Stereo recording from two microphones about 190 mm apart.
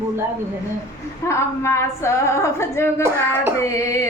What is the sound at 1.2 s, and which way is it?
Female singing, 15° left (ahead or behind).